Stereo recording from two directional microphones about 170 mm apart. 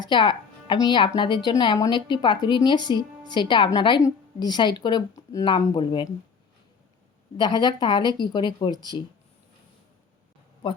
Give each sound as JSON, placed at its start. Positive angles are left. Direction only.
{"t": 0.0, "sound": "speech", "side_deg": 25}
{"t": 7.3, "sound": "speech", "side_deg": 25}